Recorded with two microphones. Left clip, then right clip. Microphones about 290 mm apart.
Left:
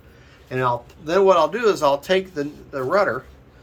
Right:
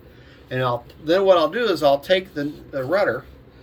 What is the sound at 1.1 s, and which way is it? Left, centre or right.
A man's voice, centre.